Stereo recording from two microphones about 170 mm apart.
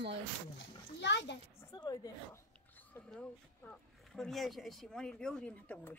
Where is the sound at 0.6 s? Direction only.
90° left.